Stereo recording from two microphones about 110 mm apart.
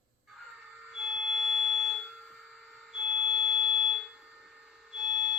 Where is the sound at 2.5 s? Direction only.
Centre (ahead or behind).